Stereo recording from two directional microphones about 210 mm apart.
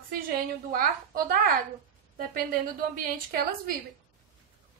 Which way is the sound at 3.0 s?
45° right (ahead or behind).